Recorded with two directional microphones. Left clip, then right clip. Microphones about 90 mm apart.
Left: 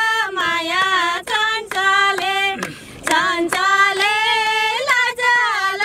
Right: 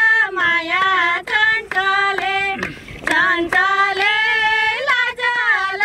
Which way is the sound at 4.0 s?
20° left (ahead or behind).